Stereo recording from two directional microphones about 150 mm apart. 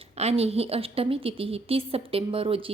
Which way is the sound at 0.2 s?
45° right (ahead or behind).